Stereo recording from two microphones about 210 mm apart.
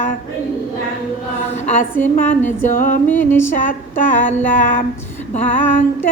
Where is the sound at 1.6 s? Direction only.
35° left (ahead or behind).